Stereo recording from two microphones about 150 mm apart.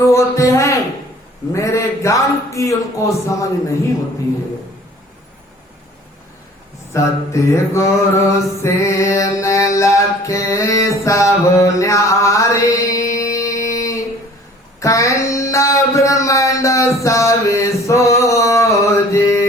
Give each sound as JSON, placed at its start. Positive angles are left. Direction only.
{"t": 0.0, "sound": "mantra", "side_deg": 20}
{"t": 6.9, "sound": "mantra", "side_deg": 20}
{"t": 9.4, "sound": "music", "side_deg": 20}
{"t": 14.8, "sound": "a sound", "side_deg": 20}